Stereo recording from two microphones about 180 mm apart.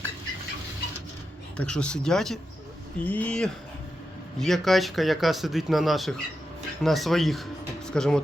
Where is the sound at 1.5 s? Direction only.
5° left (ahead or behind).